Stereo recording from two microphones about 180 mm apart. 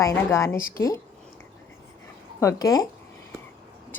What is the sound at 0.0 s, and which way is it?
Speech, 15° left (ahead or behind).